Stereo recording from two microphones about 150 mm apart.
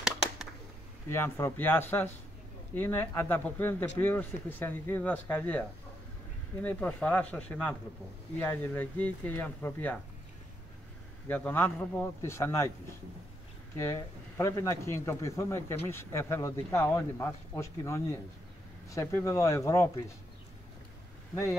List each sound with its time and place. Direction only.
1.1 s speech: 15° left (ahead or behind)
11.2 s speech: 10° left (ahead or behind)
13.7 s speech: 15° left (ahead or behind)